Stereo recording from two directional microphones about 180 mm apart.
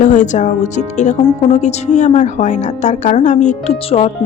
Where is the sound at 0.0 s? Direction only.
45° left (ahead or behind).